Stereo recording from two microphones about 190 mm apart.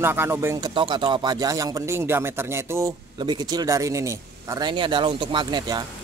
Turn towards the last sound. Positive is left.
turn(degrees=-20)  # may be behind; listen again after turning